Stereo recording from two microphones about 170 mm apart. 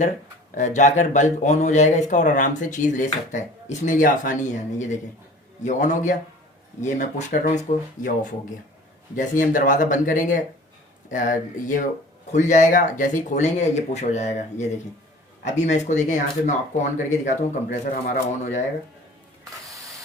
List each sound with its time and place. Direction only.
0.5 s speech: 45° left (ahead or behind)